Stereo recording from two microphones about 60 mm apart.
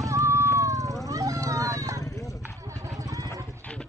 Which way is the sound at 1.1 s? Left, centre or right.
Right.